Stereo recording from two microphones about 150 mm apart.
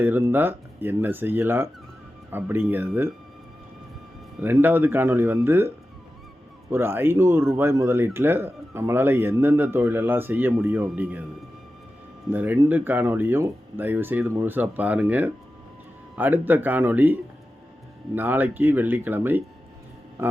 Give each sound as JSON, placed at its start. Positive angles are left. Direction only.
{"t": 0.0, "sound": "speech", "side_deg": -15}
{"t": 4.4, "sound": "speech", "side_deg": -15}
{"t": 12.3, "sound": "speech", "side_deg": -10}